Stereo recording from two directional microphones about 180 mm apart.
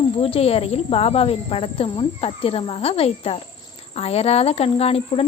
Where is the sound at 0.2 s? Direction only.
35° left (ahead or behind).